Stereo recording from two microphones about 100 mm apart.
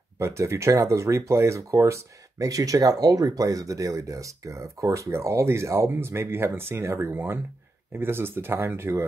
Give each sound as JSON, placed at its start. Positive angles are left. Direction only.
{"t": 0.2, "sound": "speech", "side_deg": -30}